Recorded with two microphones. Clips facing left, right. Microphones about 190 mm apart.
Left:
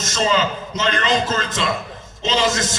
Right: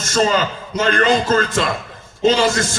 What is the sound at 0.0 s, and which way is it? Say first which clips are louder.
A man's voice: right 2 dB; 50° right (ahead or behind).